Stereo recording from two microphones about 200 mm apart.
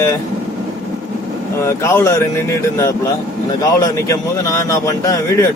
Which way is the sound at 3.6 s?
15° left (ahead or behind).